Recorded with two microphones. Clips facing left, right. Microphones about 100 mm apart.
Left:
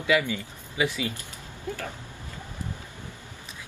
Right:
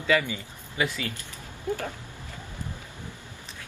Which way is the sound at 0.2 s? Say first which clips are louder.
Left 3 dB; 15° right (ahead or behind).